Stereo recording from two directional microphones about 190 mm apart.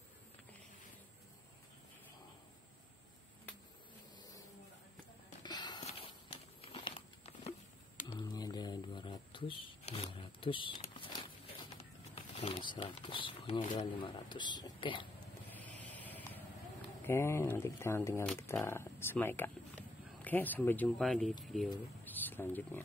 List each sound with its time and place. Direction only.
5.4 s a sound: 20° left (ahead or behind)
5.9 s walk: 30° left (ahead or behind)
6.6 s a sound: 30° left (ahead or behind)
12.2 s speech: 30° left (ahead or behind)
16.0 s vehicle: 10° left (ahead or behind)
17.0 s speech: 15° left (ahead or behind)